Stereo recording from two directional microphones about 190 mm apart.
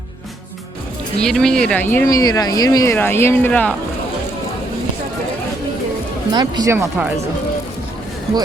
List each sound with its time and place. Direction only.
1.2 s speech: 5° left (ahead or behind)
6.3 s speech: 20° right (ahead or behind)